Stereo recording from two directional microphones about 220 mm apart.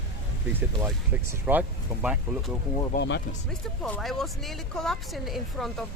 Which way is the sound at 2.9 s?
50° left (ahead or behind).